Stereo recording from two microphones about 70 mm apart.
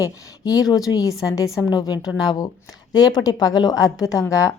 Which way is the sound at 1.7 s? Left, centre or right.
Left.